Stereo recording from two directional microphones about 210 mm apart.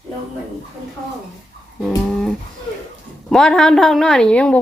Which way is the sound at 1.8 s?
Centre (ahead or behind).